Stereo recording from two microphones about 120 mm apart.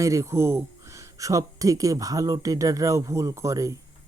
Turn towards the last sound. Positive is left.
turn(degrees=-25)  # may be behind; listen again after turning